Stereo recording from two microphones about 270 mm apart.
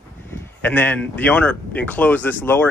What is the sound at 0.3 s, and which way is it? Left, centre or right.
Speech, centre.